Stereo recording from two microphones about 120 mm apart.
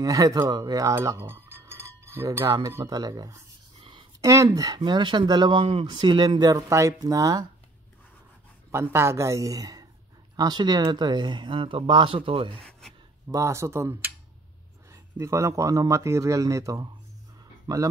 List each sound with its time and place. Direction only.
0.0 s speech: 30° right (ahead or behind)
8.7 s speech: 20° right (ahead or behind); by 12.5 s 50° right (ahead or behind)
13.3 s speech: 25° right (ahead or behind)